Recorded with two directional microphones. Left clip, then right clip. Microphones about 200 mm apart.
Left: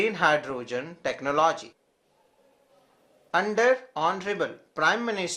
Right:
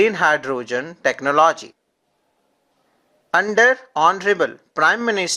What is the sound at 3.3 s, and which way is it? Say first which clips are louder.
Speech: right 7 dB; 40° right (ahead or behind).